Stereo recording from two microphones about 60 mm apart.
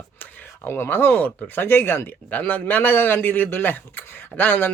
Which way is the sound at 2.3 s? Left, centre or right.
Left.